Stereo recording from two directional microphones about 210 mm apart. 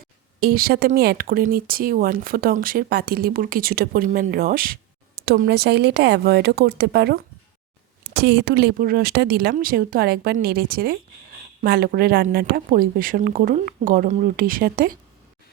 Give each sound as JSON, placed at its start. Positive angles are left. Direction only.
{"t": 0.3, "sound": "speech", "side_deg": -45}